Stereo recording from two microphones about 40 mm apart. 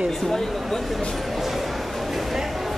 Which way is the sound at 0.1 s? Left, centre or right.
Centre.